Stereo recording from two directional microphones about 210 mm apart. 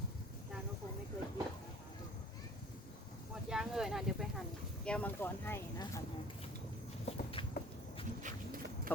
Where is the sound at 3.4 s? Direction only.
5° right (ahead or behind).